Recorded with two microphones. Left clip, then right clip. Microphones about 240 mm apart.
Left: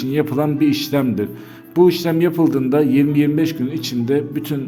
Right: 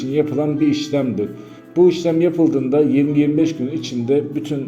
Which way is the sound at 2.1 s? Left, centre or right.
Left.